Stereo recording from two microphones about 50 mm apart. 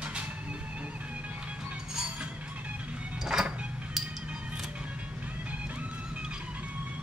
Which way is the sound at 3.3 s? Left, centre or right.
Centre.